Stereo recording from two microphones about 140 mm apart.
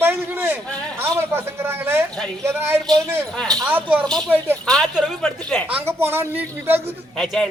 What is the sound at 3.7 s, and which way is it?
Speech, 15° right (ahead or behind).